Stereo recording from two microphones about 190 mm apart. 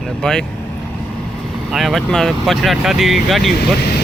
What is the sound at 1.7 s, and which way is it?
Speech, centre (ahead or behind).